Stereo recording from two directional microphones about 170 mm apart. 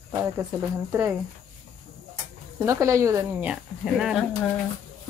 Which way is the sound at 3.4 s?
5° right (ahead or behind).